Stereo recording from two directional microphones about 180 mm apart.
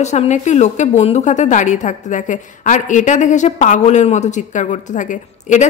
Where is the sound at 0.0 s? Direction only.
40° left (ahead or behind).